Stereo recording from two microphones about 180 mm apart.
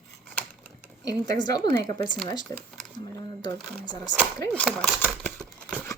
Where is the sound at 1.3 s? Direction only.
20° left (ahead or behind).